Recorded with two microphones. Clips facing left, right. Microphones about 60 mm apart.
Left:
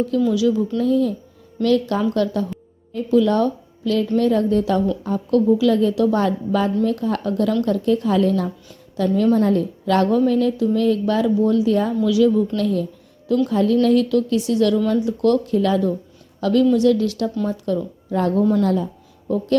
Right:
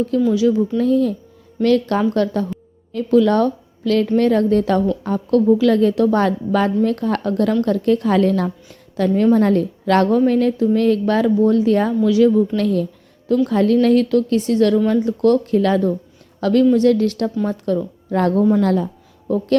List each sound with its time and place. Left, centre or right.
0.2 s speech: right
0.8 s a woman's voice: right
2.9 s a woman's voice: right
12.0 s speech: right
12.5 s a woman's voice: right
18.1 s a woman's voice: right